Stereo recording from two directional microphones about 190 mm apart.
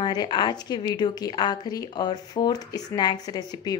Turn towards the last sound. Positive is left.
turn(degrees=20)  # may be behind; listen again after turning